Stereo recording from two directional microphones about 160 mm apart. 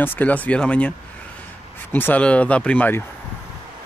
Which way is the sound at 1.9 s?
10° left (ahead or behind).